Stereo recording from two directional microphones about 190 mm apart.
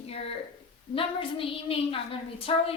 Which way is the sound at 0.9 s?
30° left (ahead or behind).